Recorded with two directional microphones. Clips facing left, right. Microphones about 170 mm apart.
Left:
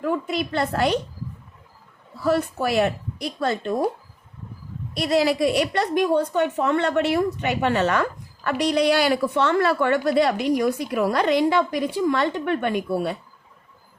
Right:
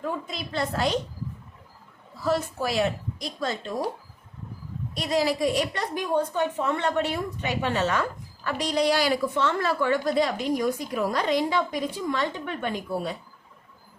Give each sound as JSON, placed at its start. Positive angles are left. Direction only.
{"t": 0.0, "sound": "speech", "side_deg": 65}
{"t": 2.2, "sound": "speech", "side_deg": 60}
{"t": 4.9, "sound": "a woman's voice", "side_deg": 70}